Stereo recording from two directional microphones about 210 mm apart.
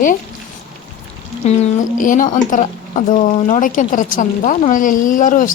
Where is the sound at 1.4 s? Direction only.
35° left (ahead or behind).